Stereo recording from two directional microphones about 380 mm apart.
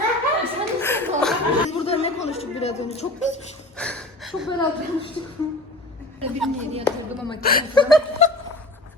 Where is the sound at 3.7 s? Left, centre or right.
Centre.